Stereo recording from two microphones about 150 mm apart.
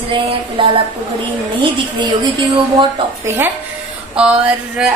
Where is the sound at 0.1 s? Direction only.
40° right (ahead or behind).